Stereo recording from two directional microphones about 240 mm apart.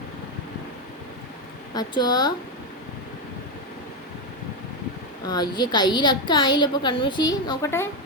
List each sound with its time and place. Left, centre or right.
1.7 s a woman's voice: centre
5.2 s a woman's voice: centre